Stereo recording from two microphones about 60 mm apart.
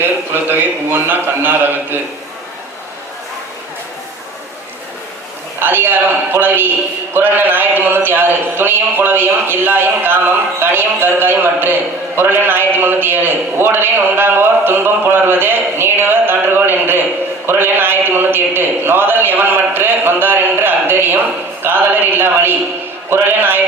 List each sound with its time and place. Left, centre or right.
0.0 s a man's voice: right
5.5 s a man's voice: right